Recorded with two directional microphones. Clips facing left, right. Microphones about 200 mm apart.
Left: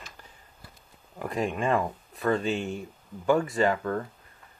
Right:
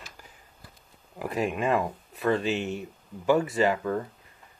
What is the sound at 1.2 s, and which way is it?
Speech, 5° right (ahead or behind).